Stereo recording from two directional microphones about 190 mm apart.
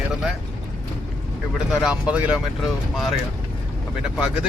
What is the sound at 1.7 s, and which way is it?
Speech, 5° right (ahead or behind).